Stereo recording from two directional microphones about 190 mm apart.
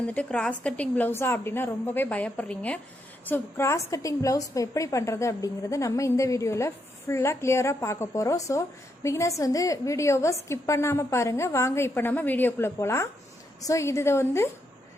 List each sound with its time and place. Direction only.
0.0 s a woman's voice: 5° left (ahead or behind)